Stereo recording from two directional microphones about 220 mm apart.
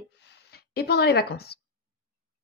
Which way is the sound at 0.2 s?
50° left (ahead or behind).